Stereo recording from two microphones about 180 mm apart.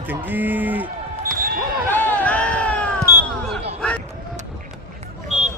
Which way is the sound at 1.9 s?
10° left (ahead or behind).